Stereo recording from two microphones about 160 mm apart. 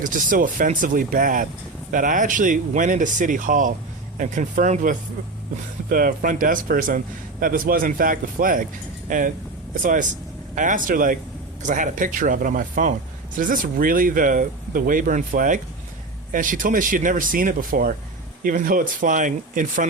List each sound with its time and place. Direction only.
0.0 s a man's voice: 55° right (ahead or behind)